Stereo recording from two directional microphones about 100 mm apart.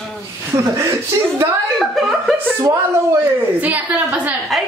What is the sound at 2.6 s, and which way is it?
Speech, 25° right (ahead or behind).